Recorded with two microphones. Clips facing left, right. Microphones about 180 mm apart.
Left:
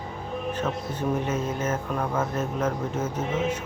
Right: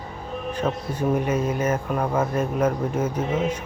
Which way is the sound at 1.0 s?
10° right (ahead or behind).